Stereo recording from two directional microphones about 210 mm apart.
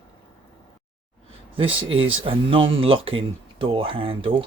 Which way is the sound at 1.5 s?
25° right (ahead or behind).